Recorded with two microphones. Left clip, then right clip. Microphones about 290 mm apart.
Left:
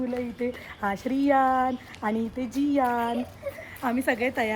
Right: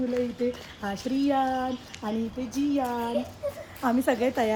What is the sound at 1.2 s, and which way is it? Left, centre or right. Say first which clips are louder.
Speech: left 5 dB; left.